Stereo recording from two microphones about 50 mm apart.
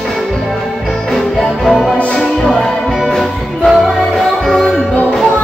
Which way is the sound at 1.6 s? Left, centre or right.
Centre.